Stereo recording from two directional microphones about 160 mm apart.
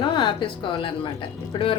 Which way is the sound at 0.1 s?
30° left (ahead or behind).